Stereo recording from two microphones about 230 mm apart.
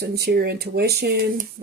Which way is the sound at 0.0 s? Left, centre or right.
Right.